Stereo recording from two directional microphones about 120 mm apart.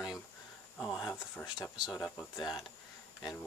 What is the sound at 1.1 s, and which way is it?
Speech, 20° left (ahead or behind).